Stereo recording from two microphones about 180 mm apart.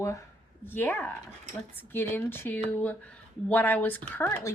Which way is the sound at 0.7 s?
10° left (ahead or behind).